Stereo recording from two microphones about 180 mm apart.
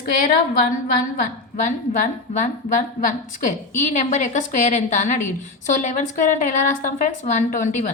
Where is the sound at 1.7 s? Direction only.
45° left (ahead or behind).